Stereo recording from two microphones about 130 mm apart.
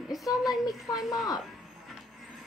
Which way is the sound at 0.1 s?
Centre (ahead or behind).